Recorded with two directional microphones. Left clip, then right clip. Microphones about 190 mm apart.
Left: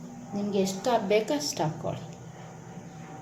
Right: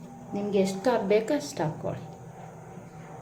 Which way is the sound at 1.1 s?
15° right (ahead or behind).